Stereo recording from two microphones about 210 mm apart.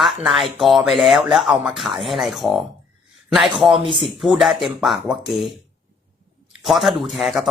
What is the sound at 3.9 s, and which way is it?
Speech, centre (ahead or behind).